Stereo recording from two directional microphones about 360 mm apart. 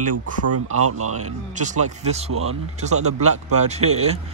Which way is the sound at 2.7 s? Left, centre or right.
Centre.